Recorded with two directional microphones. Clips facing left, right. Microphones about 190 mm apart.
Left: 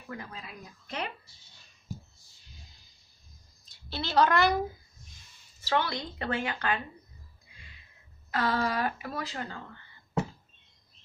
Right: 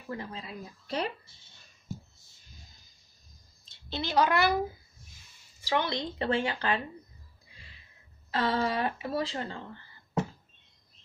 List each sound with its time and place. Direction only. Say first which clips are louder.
0.1 s speech: right 4 dB; 25° right (ahead or behind)
3.6 s a woman's voice: right 1 dB; 20° right (ahead or behind)
5.6 s speech: even; 15° right (ahead or behind)
8.3 s speech: even; 30° right (ahead or behind)